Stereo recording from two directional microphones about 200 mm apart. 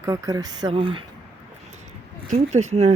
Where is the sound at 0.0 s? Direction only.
15° right (ahead or behind).